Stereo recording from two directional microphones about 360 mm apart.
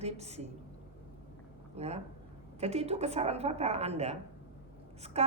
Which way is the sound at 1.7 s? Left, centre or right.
Centre.